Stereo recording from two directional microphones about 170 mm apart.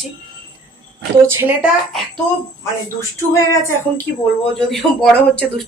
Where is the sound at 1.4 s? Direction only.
10° right (ahead or behind).